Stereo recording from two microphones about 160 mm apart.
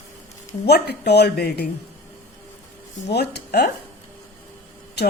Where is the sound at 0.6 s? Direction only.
90° left.